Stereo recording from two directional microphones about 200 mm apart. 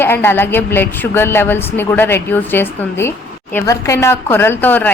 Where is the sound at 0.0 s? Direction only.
10° left (ahead or behind).